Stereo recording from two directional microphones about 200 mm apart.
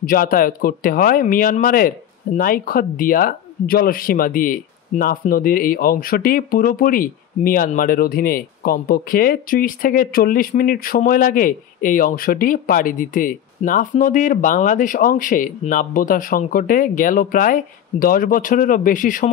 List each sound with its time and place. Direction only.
0.0 s speech: 45° left (ahead or behind)